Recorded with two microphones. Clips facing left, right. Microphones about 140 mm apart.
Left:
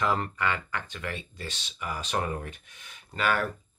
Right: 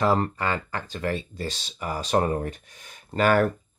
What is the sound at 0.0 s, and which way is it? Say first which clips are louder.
Speech: right 5 dB; 35° right (ahead or behind).